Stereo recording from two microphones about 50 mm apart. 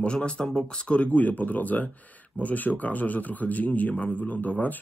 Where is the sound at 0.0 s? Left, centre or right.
Centre.